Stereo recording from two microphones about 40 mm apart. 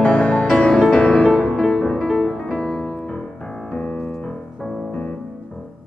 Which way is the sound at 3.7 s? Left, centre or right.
Left.